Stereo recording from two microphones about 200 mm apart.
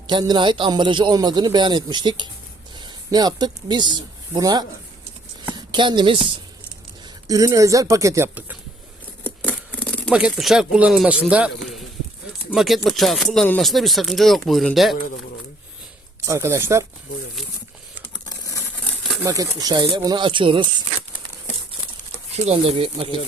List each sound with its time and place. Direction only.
0.1 s a man's voice: 20° right (ahead or behind)
9.2 s scissors: 10° left (ahead or behind)
10.1 s speech: 5° right (ahead or behind)
16.2 s speech: 15° right (ahead or behind)
18.1 s a sound: 15° left (ahead or behind)
19.2 s a man's voice: 15° right (ahead or behind)
22.4 s a man's voice: 30° right (ahead or behind)